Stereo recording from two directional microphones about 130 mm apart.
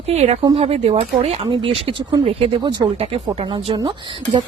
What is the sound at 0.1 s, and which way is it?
Speech, 55° right (ahead or behind).